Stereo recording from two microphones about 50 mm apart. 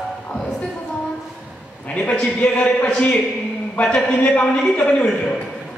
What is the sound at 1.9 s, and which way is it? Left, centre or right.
A man's voice, left.